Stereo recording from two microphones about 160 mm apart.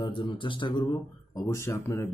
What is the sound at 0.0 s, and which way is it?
Speech, 30° left (ahead or behind).